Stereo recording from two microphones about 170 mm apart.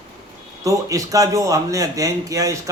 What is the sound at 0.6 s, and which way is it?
Speech, 20° right (ahead or behind).